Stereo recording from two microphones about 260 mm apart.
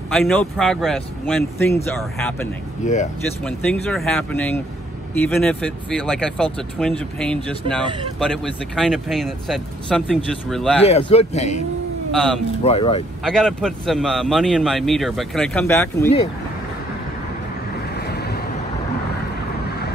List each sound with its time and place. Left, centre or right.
0.1 s a man's voice: centre
2.8 s a man's voice: left
3.4 s a man's voice: centre
10.8 s a man's voice: left
12.1 s speech: centre
12.6 s a man's voice: left
13.2 s a man's voice: centre
17.9 s vehicle: left